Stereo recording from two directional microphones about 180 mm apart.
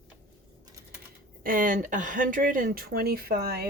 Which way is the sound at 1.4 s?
50° right (ahead or behind).